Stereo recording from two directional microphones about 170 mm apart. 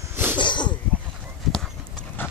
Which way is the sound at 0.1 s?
15° right (ahead or behind).